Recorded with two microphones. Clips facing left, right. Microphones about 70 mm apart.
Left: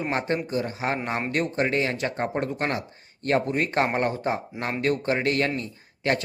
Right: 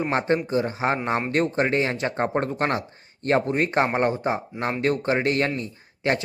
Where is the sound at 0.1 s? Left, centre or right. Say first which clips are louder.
Right 3 dB; right.